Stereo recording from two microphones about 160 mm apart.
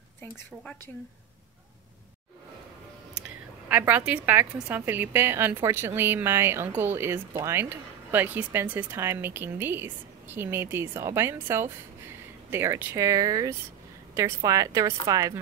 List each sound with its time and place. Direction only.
3.6 s a woman's voice: 10° right (ahead or behind)